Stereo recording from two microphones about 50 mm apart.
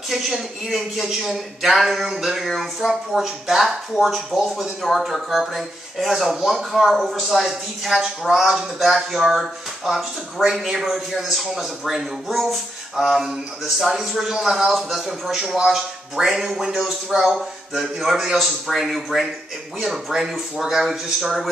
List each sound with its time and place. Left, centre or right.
0.1 s speech: centre
17.1 s speech: centre
17.7 s speech: centre